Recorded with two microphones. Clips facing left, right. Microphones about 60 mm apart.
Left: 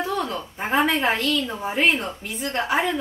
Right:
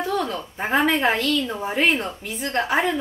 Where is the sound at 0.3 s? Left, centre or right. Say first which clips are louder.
Right 2 dB; centre.